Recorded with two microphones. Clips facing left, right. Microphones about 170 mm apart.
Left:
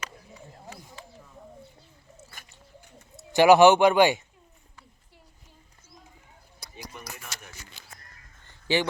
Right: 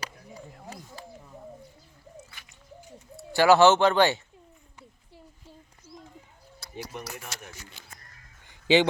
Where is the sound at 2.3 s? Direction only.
45° left (ahead or behind).